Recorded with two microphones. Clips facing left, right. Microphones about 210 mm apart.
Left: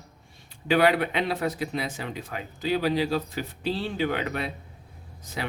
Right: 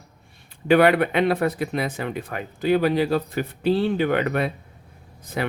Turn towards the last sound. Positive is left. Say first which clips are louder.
# right 7 dB
turn(degrees=-55)  # may be behind; listen again after turning